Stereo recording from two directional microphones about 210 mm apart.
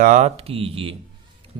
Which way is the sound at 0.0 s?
35° right (ahead or behind).